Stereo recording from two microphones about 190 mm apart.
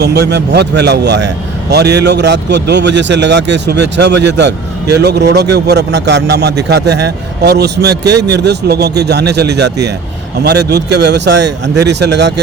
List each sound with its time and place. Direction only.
0.0 s speech: 60° right (ahead or behind)